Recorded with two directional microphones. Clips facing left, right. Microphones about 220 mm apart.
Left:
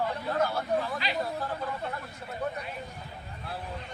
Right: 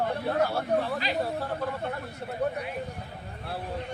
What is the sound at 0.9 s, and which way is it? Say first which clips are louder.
Speech: right 3 dB; 40° right (ahead or behind).